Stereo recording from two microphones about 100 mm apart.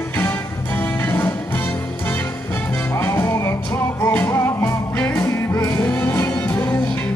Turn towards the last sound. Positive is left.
turn(degrees=20)  # may be behind; listen again after turning